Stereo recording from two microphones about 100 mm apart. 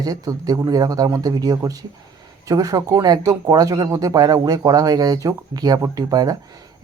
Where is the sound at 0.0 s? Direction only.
40° right (ahead or behind).